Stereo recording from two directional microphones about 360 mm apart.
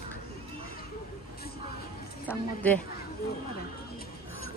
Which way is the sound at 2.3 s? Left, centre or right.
Centre.